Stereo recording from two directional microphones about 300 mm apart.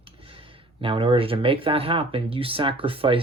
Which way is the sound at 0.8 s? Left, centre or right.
Centre.